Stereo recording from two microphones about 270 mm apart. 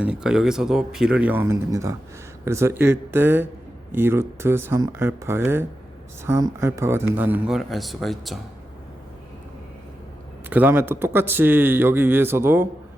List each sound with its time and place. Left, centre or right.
0.0 s speech: centre
10.5 s speech: centre